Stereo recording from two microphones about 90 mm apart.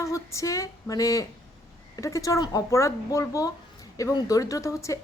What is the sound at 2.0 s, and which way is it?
A woman's voice, 35° left (ahead or behind).